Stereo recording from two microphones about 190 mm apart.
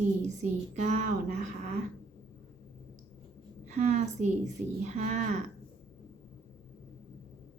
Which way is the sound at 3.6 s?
40° right (ahead or behind).